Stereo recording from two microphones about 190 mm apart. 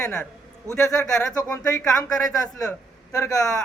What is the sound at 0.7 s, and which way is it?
Speech, 15° right (ahead or behind).